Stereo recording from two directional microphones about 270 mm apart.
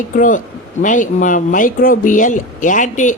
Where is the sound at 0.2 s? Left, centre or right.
Left.